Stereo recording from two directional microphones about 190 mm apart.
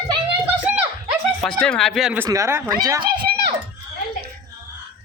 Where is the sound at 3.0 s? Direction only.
55° right (ahead or behind).